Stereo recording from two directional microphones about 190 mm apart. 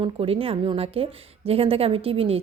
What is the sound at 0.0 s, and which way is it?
A woman's voice, 30° right (ahead or behind).